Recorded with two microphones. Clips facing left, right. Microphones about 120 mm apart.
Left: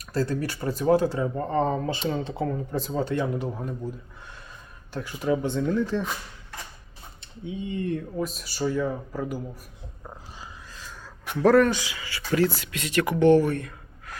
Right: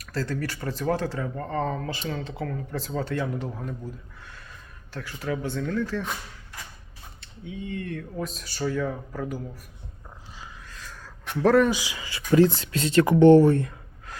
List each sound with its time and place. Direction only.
0.0 s speech: 15° left (ahead or behind)
4.9 s speech: 20° left (ahead or behind)
7.2 s speech: 20° left (ahead or behind)
8.1 s speech: 5° left (ahead or behind)
11.0 s speech: centre (ahead or behind)
11.9 s speech: 20° right (ahead or behind)